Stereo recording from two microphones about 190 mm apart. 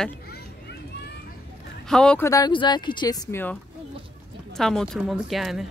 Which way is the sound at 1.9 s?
5° left (ahead or behind).